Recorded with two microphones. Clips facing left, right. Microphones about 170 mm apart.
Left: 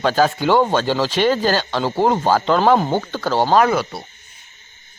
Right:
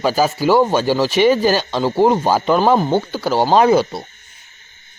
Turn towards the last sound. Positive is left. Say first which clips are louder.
# right 4 dB
turn(degrees=-25)  # may be behind; listen again after turning